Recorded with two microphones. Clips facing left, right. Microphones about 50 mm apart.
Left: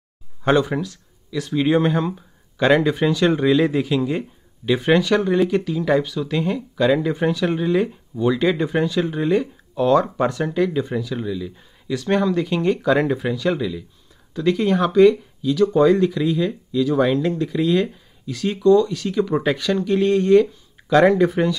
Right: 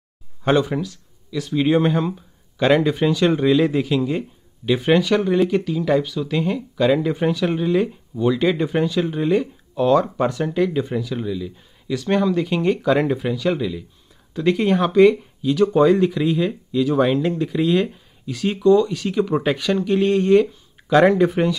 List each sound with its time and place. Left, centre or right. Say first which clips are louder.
0.4 s speech: even; centre